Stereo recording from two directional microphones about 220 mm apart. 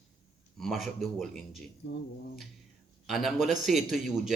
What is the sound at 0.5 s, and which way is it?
A man's voice, centre (ahead or behind).